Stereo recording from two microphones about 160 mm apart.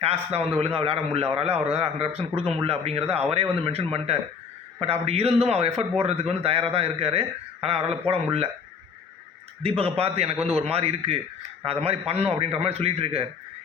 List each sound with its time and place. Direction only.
0.3 s a man's voice: 40° right (ahead or behind)
9.6 s a man's voice: 40° right (ahead or behind)